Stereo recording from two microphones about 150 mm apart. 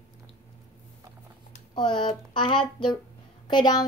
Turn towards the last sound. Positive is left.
turn(degrees=30)  # may be behind; listen again after turning